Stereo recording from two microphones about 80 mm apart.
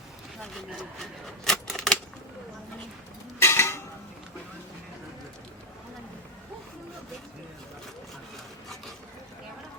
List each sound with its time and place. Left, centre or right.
1.5 s typewriter: centre
3.4 s dishes: left